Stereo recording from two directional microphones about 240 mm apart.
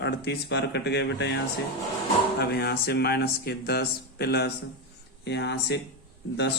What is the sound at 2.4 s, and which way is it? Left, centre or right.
Speech, left.